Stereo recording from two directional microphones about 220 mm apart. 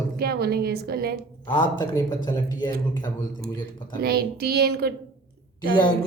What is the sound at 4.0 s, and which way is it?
Speech, 45° right (ahead or behind).